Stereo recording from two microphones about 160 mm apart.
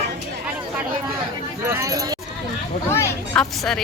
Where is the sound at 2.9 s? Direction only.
15° left (ahead or behind).